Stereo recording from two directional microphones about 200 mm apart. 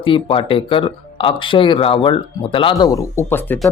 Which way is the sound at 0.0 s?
25° left (ahead or behind).